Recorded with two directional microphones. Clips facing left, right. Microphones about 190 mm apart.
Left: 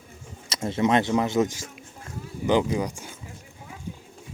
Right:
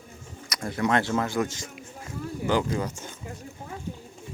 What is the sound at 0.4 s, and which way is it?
Speech, 25° left (ahead or behind).